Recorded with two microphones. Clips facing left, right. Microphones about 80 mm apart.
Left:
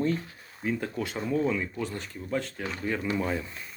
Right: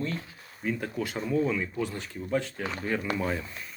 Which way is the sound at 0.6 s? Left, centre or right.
Centre.